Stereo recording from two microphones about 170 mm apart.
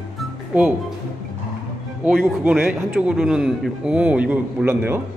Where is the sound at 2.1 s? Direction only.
Centre (ahead or behind).